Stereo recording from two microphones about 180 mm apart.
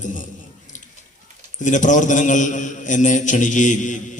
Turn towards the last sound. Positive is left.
turn(degrees=45)  # may be behind; listen again after turning